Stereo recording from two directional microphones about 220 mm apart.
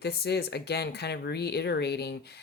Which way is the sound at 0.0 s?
45° left (ahead or behind).